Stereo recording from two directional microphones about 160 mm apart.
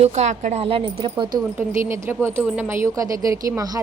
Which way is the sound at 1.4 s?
15° right (ahead or behind).